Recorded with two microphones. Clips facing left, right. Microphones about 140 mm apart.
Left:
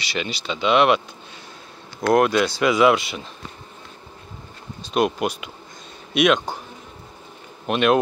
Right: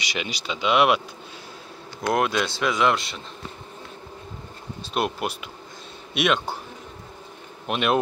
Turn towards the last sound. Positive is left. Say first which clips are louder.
# left 5 dB
turn(degrees=0)  # may be behind; listen again after turning